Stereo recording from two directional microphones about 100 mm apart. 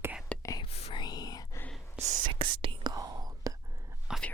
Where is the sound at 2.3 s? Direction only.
55° right (ahead or behind); by 3.5 s 40° right (ahead or behind).